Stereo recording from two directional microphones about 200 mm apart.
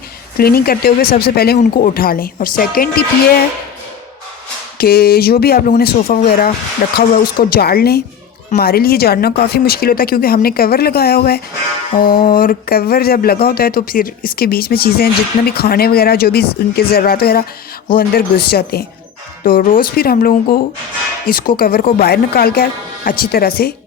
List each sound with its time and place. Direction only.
0.3 s speech: 50° left (ahead or behind)
4.8 s speech: 50° left (ahead or behind)